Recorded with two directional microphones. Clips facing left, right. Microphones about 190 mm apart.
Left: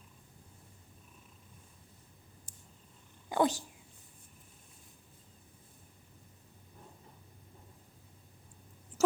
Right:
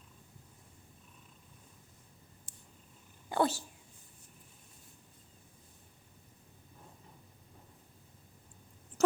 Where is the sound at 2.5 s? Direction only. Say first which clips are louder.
Even; 40° left (ahead or behind).